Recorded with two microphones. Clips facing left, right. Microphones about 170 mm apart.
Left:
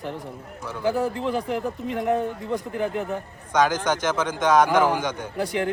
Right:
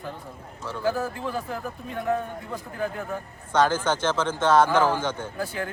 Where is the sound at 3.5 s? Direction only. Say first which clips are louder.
Left 1 dB; 10° left (ahead or behind).